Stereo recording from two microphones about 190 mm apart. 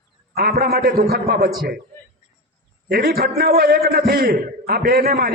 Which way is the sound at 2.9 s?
55° right (ahead or behind).